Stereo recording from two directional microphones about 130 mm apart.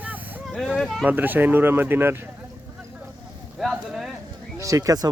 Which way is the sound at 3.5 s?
5° right (ahead or behind).